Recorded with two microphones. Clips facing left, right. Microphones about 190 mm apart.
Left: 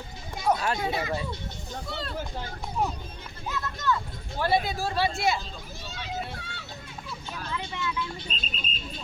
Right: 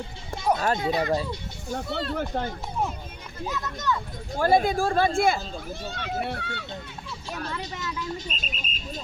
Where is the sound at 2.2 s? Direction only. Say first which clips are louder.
Right 7 dB; 60° right (ahead or behind).